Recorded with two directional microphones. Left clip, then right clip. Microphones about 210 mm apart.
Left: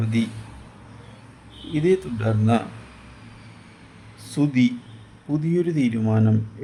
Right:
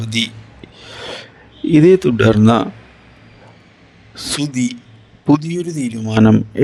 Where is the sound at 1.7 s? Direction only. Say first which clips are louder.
Right 11 dB; 45° right (ahead or behind).